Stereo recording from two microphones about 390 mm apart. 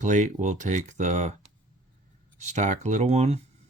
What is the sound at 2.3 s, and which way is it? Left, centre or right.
Speech, centre.